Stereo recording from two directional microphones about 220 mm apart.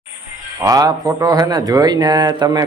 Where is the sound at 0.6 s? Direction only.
15° right (ahead or behind).